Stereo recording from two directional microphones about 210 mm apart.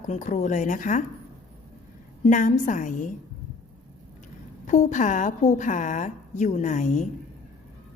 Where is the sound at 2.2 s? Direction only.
35° left (ahead or behind).